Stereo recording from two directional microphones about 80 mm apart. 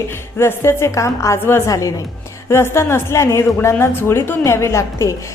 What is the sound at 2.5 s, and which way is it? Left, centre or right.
A woman's voice, left.